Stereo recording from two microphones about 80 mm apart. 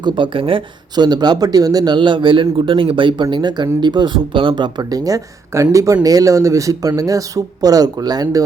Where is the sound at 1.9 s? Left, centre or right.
Right.